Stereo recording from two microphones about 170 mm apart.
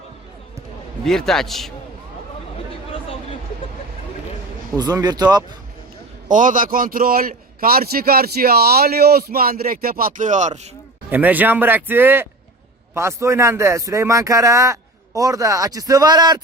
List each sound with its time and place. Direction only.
1.0 s a man's voice: centre (ahead or behind)
4.8 s speech: 25° right (ahead or behind)
6.2 s a man's voice: 50° right (ahead or behind)
11.1 s speech: 10° right (ahead or behind)